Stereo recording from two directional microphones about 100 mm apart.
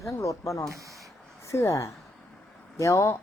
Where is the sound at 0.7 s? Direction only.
30° right (ahead or behind).